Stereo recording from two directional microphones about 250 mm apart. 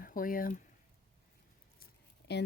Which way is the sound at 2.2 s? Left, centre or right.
Left.